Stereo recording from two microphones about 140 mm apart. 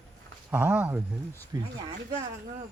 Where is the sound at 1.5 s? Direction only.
25° right (ahead or behind).